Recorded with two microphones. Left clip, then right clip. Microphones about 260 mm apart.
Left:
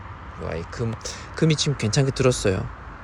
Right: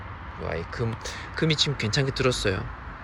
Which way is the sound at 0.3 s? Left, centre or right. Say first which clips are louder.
Left 1 dB; centre.